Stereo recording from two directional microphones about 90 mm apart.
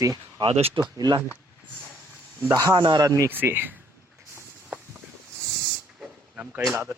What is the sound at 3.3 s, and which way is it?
Speech, 20° right (ahead or behind).